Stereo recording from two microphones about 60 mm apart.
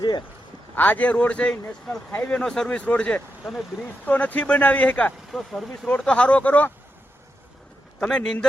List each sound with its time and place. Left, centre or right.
0.8 s speech: left
2.4 s speech: centre
2.6 s speech: left
5.3 s speech: centre
6.0 s speech: centre
7.9 s speech: centre